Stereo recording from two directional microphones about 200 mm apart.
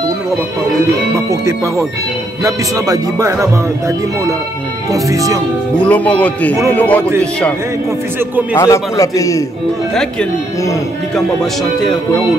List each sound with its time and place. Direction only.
1.3 s speech: 15° right (ahead or behind)
5.8 s a man's voice: 5° left (ahead or behind)
8.5 s a man's voice: 15° left (ahead or behind)